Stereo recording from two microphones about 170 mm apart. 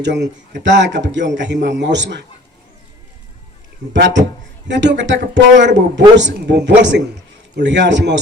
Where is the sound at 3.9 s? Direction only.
90° right.